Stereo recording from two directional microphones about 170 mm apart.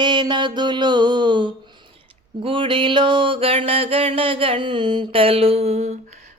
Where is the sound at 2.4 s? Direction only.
30° right (ahead or behind).